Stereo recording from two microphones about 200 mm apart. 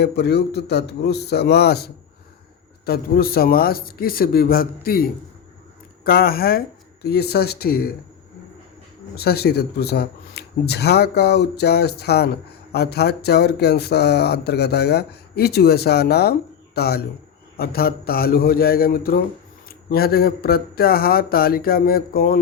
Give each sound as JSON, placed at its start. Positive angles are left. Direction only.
{"t": 0.0, "sound": "a man's voice", "side_deg": 55}
{"t": 6.1, "sound": "speech", "side_deg": 50}
{"t": 9.1, "sound": "speech", "side_deg": 50}